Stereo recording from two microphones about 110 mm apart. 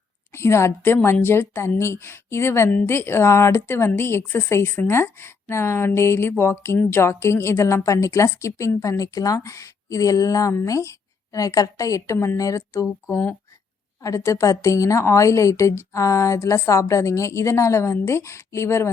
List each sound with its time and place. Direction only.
0.3 s a woman's voice: 25° left (ahead or behind)